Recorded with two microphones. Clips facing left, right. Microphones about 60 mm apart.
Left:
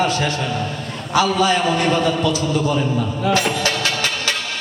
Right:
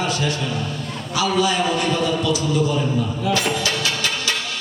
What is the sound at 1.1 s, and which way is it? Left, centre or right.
A man's voice, left.